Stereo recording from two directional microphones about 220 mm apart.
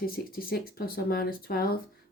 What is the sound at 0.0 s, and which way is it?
Speech, 40° left (ahead or behind).